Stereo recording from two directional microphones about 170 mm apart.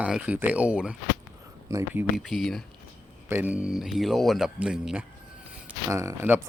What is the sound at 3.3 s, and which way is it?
Speech, 10° right (ahead or behind).